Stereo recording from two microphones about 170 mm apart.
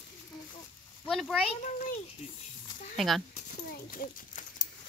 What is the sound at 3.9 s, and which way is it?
Speech, 55° left (ahead or behind).